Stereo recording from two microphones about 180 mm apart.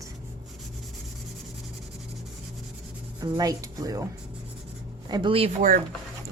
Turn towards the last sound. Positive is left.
turn(degrees=-50)  # may be behind; listen again after turning